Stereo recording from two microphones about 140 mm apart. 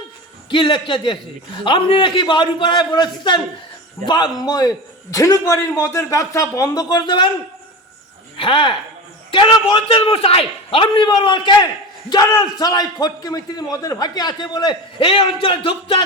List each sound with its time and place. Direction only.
0.5 s a man's voice: 35° left (ahead or behind)
8.4 s a man's voice: 40° left (ahead or behind)